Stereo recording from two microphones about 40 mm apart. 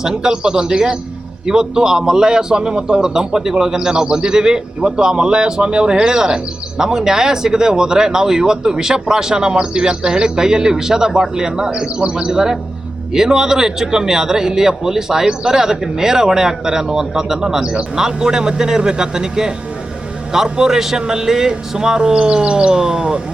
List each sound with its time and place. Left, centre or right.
0.0 s a man's voice: centre